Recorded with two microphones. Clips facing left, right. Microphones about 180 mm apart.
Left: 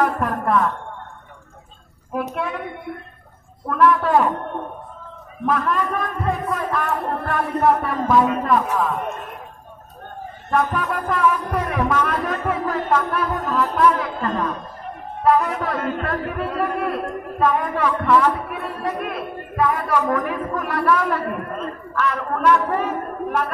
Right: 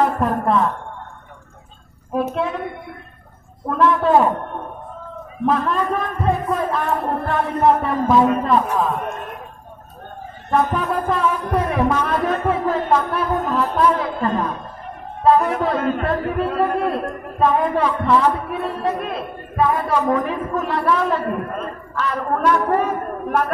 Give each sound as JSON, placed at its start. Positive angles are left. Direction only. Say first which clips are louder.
{"t": 0.0, "sound": "a sound", "louder": "right 2 dB", "side_deg": -25}
{"t": 3.6, "sound": "a man's voice", "louder": "right 1 dB", "side_deg": -25}
{"t": 5.4, "sound": "a man's voice", "louder": "right 2 dB", "side_deg": -25}
{"t": 10.5, "sound": "a man's voice", "louder": "right 2 dB", "side_deg": -25}